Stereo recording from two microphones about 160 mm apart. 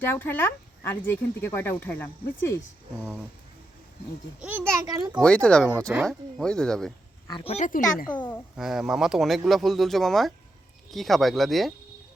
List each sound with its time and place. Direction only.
0.0 s speech: 15° left (ahead or behind)
4.4 s a child's voice: 10° right (ahead or behind)
5.2 s speech: 5° left (ahead or behind)
7.3 s speech: 35° left (ahead or behind)
7.7 s speech: 60° left (ahead or behind)
8.1 s speech: 10° left (ahead or behind)
8.5 s speech: centre (ahead or behind)